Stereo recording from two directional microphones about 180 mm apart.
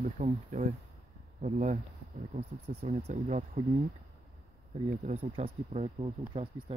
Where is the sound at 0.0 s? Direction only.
45° right (ahead or behind).